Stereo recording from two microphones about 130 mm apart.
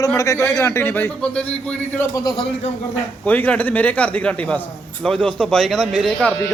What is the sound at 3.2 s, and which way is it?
A man's voice, 10° left (ahead or behind).